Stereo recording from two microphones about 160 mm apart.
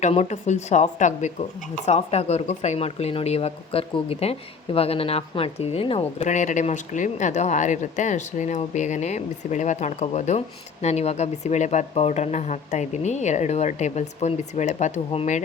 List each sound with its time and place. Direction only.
0.0 s speech: 45° left (ahead or behind)